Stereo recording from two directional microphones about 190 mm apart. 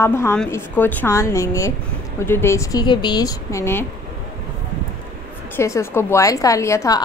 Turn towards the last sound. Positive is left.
turn(degrees=15)  # may be behind; listen again after turning